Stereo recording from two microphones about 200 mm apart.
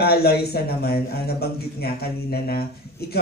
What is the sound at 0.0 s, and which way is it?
A man's voice, 50° left (ahead or behind).